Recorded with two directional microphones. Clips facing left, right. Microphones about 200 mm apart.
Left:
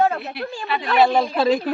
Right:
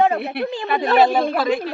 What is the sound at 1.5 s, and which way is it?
Speech, 40° left (ahead or behind).